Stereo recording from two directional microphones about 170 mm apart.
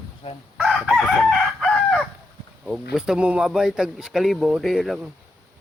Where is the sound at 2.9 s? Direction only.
5° right (ahead or behind).